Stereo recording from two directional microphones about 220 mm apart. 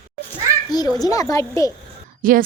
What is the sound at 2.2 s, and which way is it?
Speech, 40° right (ahead or behind).